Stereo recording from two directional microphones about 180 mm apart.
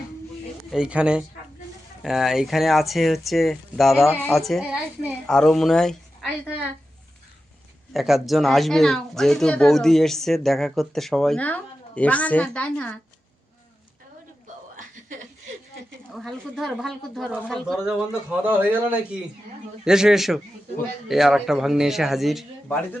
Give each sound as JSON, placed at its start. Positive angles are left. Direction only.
{"t": 0.7, "sound": "a woman's voice", "side_deg": -5}
{"t": 7.9, "sound": "speech", "side_deg": 0}
{"t": 14.8, "sound": "a sound", "side_deg": -45}
{"t": 16.1, "sound": "a man's voice", "side_deg": 0}